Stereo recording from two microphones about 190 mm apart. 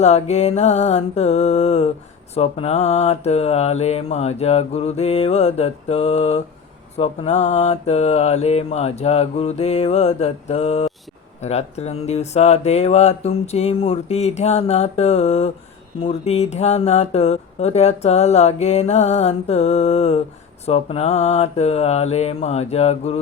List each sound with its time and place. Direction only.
0.0 s speech: 35° left (ahead or behind)